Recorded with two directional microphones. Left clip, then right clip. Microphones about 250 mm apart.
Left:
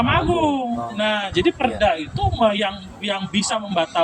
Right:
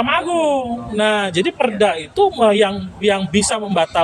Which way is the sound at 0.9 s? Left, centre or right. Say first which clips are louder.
Right 6 dB; right.